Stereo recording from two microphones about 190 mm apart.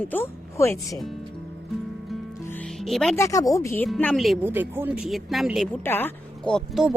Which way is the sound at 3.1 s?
15° left (ahead or behind).